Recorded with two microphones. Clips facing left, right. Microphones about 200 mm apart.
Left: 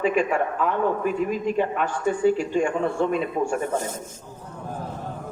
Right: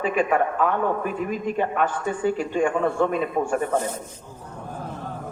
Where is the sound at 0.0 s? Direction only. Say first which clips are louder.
Even; 55° right (ahead or behind).